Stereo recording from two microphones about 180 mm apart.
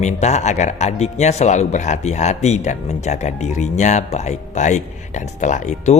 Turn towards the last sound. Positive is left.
turn(degrees=40)  # may be behind; listen again after turning